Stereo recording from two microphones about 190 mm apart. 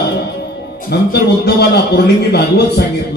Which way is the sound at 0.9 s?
60° left (ahead or behind).